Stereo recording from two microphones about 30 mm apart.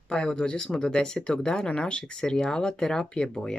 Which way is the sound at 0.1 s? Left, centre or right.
Left.